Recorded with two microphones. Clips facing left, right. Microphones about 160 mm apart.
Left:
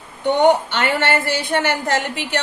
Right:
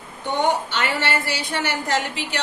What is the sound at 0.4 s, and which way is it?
A woman's voice, 55° left (ahead or behind).